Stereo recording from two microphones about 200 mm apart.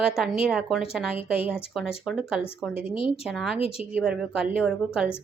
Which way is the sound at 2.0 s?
Centre (ahead or behind).